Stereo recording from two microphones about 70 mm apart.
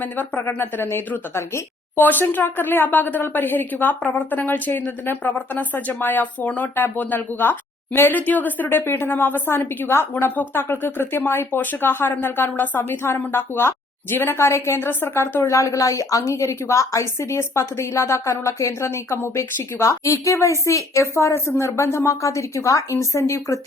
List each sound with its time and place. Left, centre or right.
0.0 s a woman's voice: left
2.0 s a woman's voice: left
15.4 s a woman's voice: left